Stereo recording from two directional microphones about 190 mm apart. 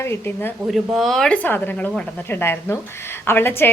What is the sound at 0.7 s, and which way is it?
Speech, centre (ahead or behind).